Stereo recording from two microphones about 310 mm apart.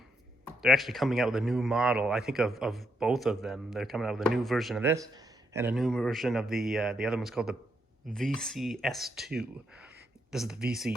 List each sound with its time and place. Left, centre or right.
0.4 s speech: centre